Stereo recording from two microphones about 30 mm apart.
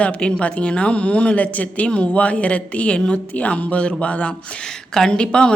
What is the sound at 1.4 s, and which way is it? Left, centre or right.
Speech, left.